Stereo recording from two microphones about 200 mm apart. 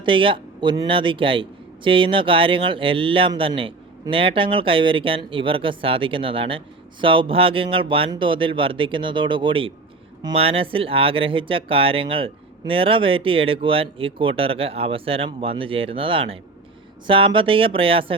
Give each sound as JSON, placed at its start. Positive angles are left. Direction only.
{"t": 0.0, "sound": "a man's voice", "side_deg": -25}